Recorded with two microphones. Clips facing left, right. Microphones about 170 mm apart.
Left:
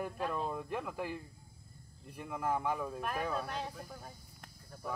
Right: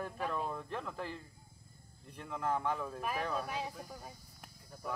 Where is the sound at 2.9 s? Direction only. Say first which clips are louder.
Even; 5° right (ahead or behind).